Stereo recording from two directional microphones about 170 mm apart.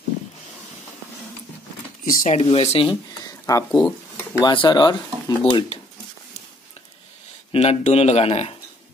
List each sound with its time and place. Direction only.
2.0 s speech: 40° left (ahead or behind)
7.5 s speech: 35° left (ahead or behind)